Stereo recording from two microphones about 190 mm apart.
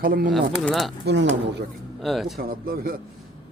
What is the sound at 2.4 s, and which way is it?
Speech, 50° right (ahead or behind).